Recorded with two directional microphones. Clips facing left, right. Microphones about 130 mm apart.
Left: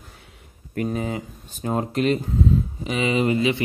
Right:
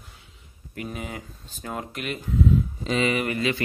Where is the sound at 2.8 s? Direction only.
15° left (ahead or behind).